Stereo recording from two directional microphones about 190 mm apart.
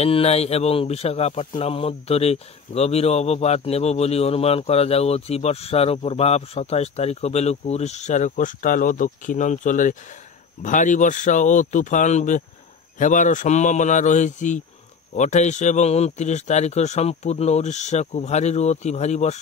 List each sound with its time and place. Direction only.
0.0 s speech: 30° left (ahead or behind)